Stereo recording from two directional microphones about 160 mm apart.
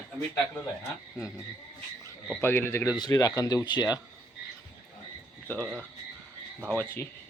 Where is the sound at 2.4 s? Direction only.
15° left (ahead or behind).